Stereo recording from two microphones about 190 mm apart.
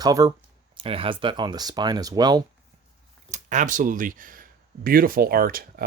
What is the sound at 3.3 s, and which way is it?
Speech, 40° right (ahead or behind).